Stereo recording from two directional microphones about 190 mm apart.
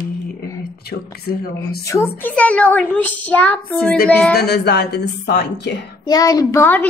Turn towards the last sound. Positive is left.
turn(degrees=10)  # may be behind; listen again after turning